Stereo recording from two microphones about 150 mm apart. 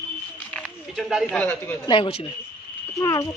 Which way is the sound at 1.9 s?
35° left (ahead or behind).